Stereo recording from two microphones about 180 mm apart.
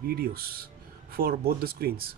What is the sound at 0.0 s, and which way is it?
Speech, 60° right (ahead or behind).